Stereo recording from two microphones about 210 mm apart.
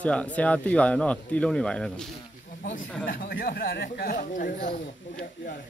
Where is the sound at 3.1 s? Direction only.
45° left (ahead or behind).